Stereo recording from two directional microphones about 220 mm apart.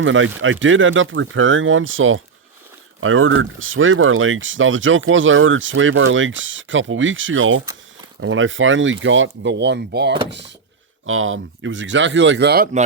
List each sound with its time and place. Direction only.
0.0 s speech: 60° right (ahead or behind)
11.0 s speech: 65° right (ahead or behind); by 12.6 s 50° right (ahead or behind)